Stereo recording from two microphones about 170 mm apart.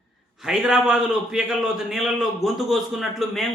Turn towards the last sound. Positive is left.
turn(degrees=0)  # may be behind; listen again after turning